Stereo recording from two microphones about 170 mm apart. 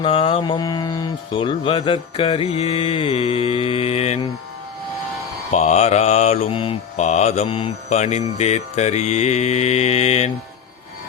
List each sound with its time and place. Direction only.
0.0 s mantra: 30° left (ahead or behind)
5.5 s mantra: 45° left (ahead or behind)